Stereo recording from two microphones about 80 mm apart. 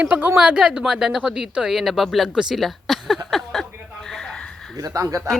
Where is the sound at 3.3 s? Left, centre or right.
Centre.